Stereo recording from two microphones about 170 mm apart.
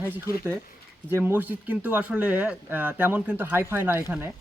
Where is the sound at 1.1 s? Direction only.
15° right (ahead or behind).